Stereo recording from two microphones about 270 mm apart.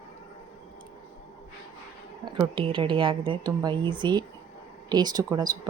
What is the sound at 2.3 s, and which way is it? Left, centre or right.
Speech, centre.